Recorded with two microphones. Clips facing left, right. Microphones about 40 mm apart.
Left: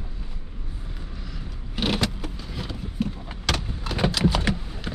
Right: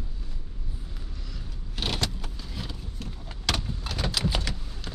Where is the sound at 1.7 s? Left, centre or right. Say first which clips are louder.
Left 6 dB; centre.